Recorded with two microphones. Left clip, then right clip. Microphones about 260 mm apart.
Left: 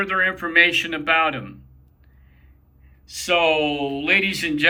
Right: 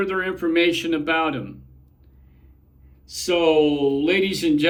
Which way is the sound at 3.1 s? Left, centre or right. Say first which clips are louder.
Even; centre.